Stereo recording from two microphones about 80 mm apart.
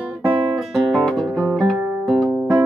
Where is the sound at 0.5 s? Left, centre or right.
Centre.